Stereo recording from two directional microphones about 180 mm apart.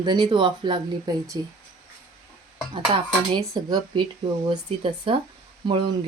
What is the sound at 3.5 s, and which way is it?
Speech, 20° right (ahead or behind).